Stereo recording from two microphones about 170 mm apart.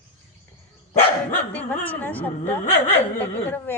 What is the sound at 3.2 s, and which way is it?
Speech, 10° left (ahead or behind).